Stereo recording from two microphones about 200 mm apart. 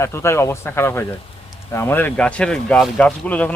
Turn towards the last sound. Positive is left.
turn(degrees=5)  # may be behind; listen again after turning